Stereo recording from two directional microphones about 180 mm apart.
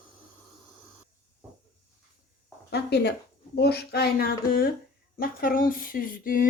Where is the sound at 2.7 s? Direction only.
65° left (ahead or behind).